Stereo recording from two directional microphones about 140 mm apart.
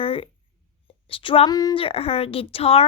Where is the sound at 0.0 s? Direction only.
40° left (ahead or behind).